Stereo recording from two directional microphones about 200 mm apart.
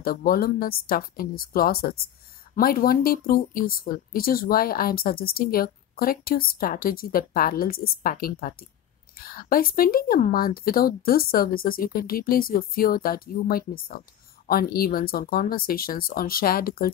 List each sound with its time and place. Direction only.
0.0 s speech: 45° left (ahead or behind)